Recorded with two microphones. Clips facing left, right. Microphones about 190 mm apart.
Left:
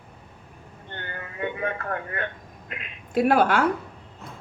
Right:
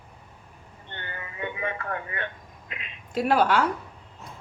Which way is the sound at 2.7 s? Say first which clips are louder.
Left 3 dB; 55° left (ahead or behind).